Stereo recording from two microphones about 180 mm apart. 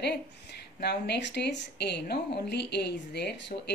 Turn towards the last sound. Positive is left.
turn(degrees=70)  # may be behind; listen again after turning